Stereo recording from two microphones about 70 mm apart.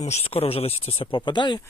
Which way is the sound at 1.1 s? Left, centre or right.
Left.